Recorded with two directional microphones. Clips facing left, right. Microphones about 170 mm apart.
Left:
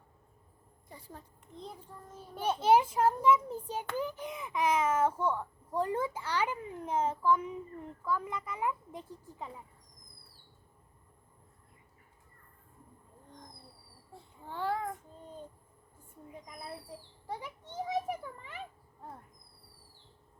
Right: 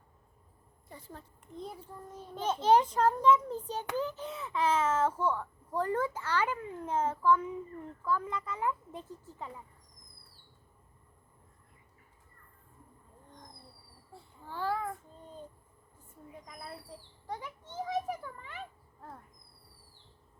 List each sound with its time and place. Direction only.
0.9 s speech: 10° left (ahead or behind)
1.5 s child singing: 5° right (ahead or behind)
2.3 s a child's voice: 10° left (ahead or behind)
14.1 s child singing: 20° left (ahead or behind)
17.4 s a child's voice: 15° left (ahead or behind)